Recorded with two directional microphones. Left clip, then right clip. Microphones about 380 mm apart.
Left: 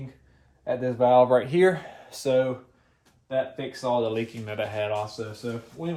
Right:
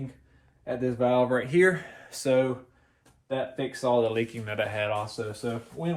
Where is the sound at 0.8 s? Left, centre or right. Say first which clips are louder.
Left 5 dB; centre.